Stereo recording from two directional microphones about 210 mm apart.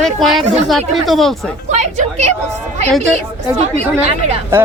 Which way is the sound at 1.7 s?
35° right (ahead or behind).